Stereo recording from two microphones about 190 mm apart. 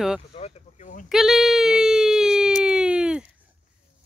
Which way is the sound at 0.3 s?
35° left (ahead or behind).